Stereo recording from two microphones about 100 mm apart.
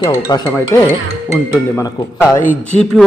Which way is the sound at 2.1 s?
20° left (ahead or behind).